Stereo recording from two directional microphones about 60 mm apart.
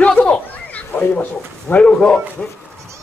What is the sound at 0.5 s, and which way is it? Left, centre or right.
Children playing, left.